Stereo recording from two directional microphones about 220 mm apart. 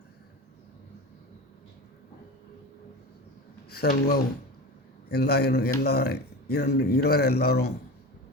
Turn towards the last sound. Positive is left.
turn(degrees=45)  # may be behind; listen again after turning